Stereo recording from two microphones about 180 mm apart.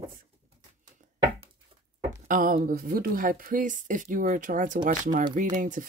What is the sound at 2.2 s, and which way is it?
Speech, 50° right (ahead or behind).